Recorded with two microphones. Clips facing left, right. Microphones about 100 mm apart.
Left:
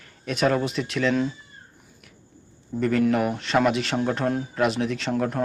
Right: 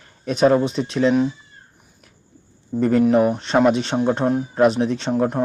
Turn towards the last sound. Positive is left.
turn(degrees=-25)  # may be behind; listen again after turning